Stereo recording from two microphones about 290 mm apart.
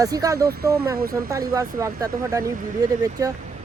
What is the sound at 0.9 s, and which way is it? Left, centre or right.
Speech, right.